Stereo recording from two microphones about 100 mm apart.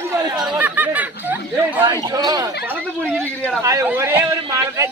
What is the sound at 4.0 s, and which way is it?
Speech, 30° right (ahead or behind).